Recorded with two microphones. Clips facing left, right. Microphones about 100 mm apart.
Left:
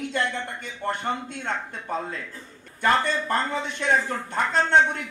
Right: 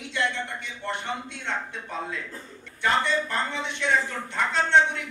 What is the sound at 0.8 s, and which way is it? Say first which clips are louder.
A man's voice: left 4 dB; 45° left (ahead or behind).